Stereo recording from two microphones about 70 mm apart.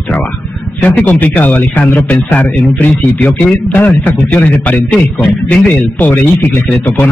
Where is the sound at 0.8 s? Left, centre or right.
Left.